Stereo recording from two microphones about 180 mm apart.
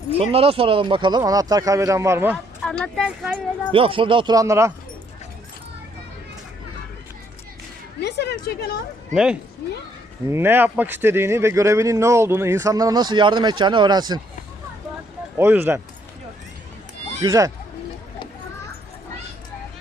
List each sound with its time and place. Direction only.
0.1 s speech: 35° right (ahead or behind); by 2.3 s 15° right (ahead or behind)
2.8 s speech: 5° left (ahead or behind)
3.7 s speech: 30° right (ahead or behind)
8.0 s a sound: 70° left (ahead or behind)
9.1 s speech: 5° right (ahead or behind); by 14.2 s 25° right (ahead or behind)
15.4 s speech: 15° right (ahead or behind)
17.2 s speech: 20° right (ahead or behind)